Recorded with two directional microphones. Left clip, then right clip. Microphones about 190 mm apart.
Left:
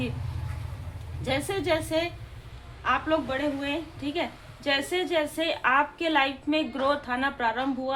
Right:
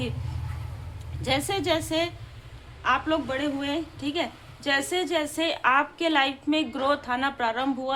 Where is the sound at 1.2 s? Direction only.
20° right (ahead or behind).